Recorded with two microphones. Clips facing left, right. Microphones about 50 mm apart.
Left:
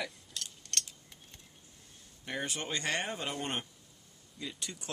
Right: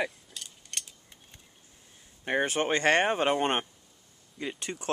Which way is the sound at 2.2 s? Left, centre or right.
Right.